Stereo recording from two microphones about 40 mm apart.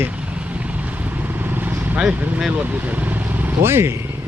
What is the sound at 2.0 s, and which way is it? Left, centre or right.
Speech, centre.